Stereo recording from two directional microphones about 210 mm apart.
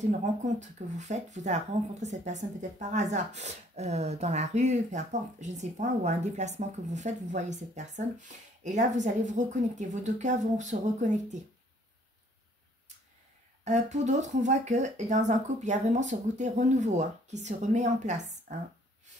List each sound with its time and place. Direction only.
0.0 s speech: 35° right (ahead or behind)
13.7 s speech: 35° right (ahead or behind)